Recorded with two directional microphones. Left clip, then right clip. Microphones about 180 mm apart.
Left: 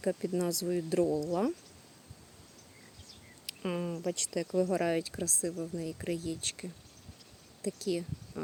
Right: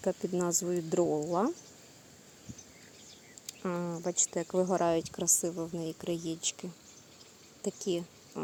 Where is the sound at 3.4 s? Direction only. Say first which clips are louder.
Even; 10° left (ahead or behind).